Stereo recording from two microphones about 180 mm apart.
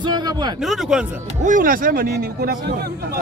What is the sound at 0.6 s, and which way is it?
Speech, centre (ahead or behind).